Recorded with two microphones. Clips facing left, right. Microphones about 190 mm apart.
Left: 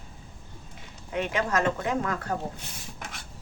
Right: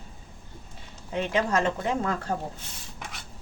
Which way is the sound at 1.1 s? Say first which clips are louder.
Right 1 dB; 30° right (ahead or behind).